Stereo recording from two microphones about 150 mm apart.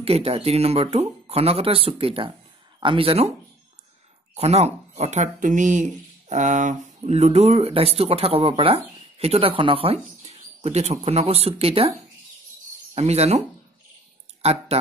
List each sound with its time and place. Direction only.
0.0 s speech: 40° right (ahead or behind)
4.4 s speech: 45° right (ahead or behind)
12.9 s speech: 45° right (ahead or behind)
14.4 s speech: 45° right (ahead or behind)